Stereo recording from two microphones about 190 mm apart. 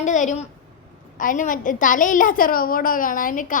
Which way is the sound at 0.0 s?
40° left (ahead or behind).